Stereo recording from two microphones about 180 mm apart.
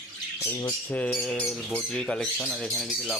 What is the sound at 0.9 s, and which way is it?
Speech, 10° left (ahead or behind).